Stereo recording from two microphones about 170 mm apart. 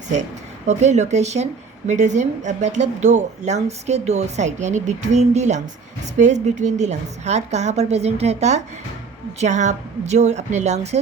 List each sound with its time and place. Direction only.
0.7 s a woman's voice: 40° right (ahead or behind)